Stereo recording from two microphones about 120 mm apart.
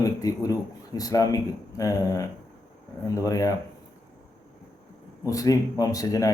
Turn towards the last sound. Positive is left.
turn(degrees=30)  # may be behind; listen again after turning